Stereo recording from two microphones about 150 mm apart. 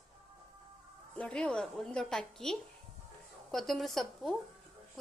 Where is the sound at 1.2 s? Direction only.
5° left (ahead or behind).